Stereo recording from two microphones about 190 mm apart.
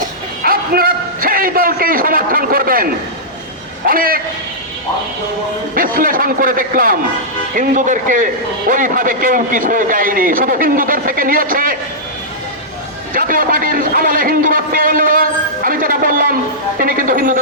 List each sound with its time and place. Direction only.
0.4 s a sound: 50° right (ahead or behind)
3.8 s a man's voice: 50° right (ahead or behind)
5.7 s a man's voice: 45° right (ahead or behind)
13.1 s a man's voice: 50° right (ahead or behind)